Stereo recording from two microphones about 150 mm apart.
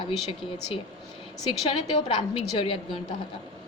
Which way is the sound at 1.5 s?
35° left (ahead or behind).